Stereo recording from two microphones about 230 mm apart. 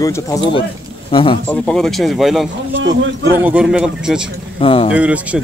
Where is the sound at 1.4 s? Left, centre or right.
Centre.